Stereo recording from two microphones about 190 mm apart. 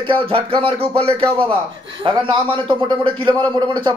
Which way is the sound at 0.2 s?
30° right (ahead or behind).